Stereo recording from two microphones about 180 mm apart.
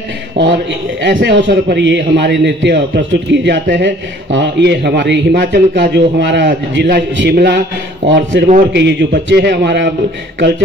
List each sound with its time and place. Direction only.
0.4 s speech: 75° right (ahead or behind)
8.1 s speech: 80° right
8.7 s speech: 70° right (ahead or behind)